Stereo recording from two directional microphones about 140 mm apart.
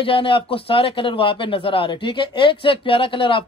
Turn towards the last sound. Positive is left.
turn(degrees=40)  # may be behind; listen again after turning